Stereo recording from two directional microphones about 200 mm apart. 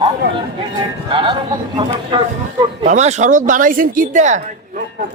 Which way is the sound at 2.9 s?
35° right (ahead or behind).